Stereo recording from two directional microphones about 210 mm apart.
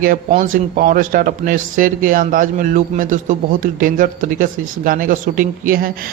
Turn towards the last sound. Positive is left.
turn(degrees=-45)  # may be behind; listen again after turning